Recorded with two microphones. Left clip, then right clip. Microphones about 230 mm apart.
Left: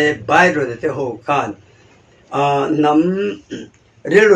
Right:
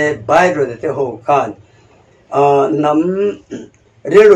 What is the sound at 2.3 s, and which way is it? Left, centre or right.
Speech, left.